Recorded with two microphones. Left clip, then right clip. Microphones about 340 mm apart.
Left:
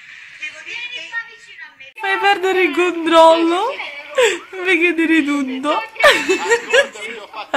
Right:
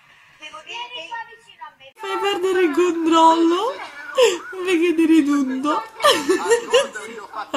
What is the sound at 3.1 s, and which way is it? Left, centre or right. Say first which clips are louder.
Speech: left 5 dB; left.